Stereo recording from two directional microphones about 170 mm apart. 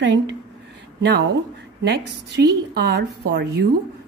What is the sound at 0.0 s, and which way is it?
A woman's voice, 90° right.